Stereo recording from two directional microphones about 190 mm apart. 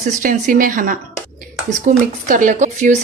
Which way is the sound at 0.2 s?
45° right (ahead or behind).